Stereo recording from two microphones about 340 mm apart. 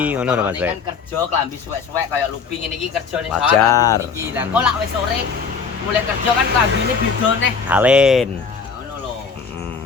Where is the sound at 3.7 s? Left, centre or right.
Centre.